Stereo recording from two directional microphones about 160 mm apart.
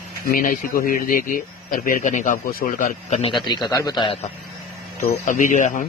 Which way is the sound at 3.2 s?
30° left (ahead or behind).